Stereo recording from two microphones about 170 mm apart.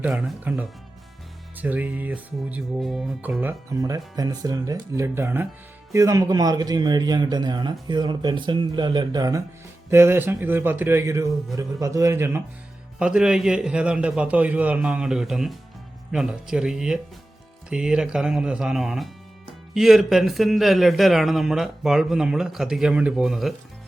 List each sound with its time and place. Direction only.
0.0 s music: 5° right (ahead or behind)
5.9 s a man's voice: 20° right (ahead or behind)
9.9 s music: 15° right (ahead or behind)
13.0 s a man's voice: 5° right (ahead or behind)